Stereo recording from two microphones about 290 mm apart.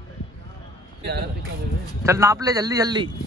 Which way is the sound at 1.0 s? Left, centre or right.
Right.